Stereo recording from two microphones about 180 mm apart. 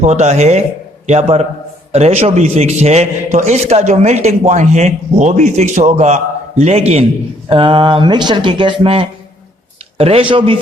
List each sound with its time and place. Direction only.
0.0 s speech: 40° right (ahead or behind)